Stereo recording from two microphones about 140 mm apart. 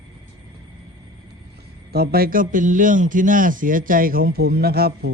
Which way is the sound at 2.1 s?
90° right.